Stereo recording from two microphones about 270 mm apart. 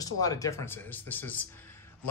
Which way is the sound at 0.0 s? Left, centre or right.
Centre.